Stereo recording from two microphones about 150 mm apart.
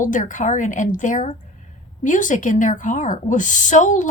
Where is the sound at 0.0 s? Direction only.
60° left (ahead or behind).